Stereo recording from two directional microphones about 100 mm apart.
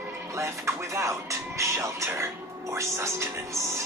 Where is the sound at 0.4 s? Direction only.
30° right (ahead or behind).